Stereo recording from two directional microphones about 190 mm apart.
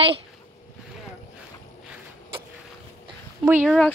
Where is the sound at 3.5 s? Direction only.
10° right (ahead or behind).